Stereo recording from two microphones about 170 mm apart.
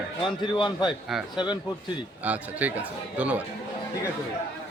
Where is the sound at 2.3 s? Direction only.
10° right (ahead or behind).